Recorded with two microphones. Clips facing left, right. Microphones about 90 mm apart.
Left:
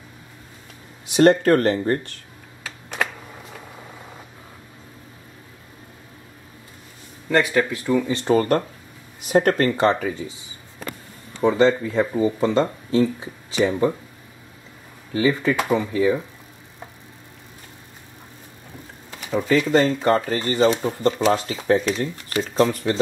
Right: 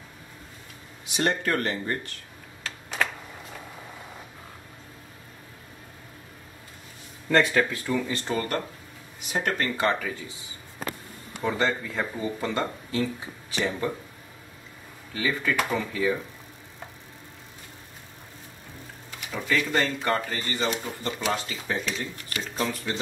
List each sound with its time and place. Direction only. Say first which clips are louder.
1.1 s speech: left 11 dB; 40° left (ahead or behind)
7.2 s speech: left 2 dB; 10° left (ahead or behind)
8.3 s speech: left 12 dB; 30° left (ahead or behind)
9.3 s speech: left 10 dB; 40° left (ahead or behind); by 10.3 s 25° left (ahead or behind)
11.4 s speech: left 9 dB; 25° left (ahead or behind)
15.1 s speech: left 7 dB; 25° left (ahead or behind)
19.1 s speech: left 8 dB; 30° left (ahead or behind)